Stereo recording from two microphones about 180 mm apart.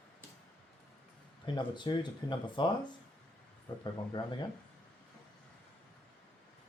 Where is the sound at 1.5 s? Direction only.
25° left (ahead or behind).